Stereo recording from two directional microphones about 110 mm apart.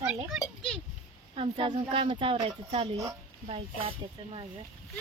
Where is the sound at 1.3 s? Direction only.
60° right (ahead or behind).